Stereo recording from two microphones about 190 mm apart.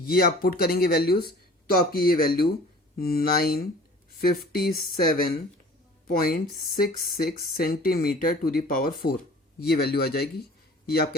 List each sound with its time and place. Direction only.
0.0 s a man's voice: 55° left (ahead or behind)